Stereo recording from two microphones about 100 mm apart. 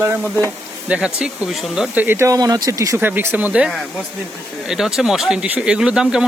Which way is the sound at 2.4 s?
40° right (ahead or behind).